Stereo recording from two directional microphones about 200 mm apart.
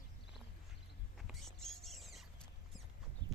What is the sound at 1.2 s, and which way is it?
Rodents, centre (ahead or behind).